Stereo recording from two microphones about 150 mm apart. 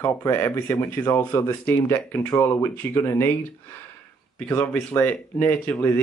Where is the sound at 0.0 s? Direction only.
20° left (ahead or behind).